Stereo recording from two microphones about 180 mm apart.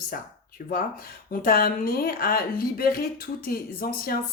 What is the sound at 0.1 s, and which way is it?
A woman's voice, 55° left (ahead or behind).